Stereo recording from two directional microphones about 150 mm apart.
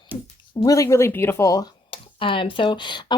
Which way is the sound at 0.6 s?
20° left (ahead or behind).